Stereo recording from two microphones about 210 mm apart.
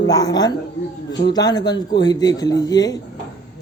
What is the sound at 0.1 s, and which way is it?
A man's voice, 20° left (ahead or behind).